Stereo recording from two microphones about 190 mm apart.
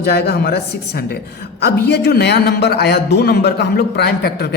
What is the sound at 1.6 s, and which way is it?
A man's voice, 60° left (ahead or behind).